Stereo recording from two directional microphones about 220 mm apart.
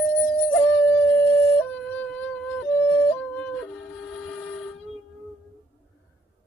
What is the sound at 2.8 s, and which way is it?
Yodeling, 10° left (ahead or behind).